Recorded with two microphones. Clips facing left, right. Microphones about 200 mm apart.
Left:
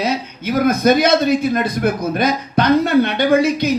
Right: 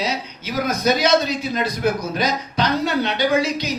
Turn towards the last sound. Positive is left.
turn(degrees=55)  # may be behind; listen again after turning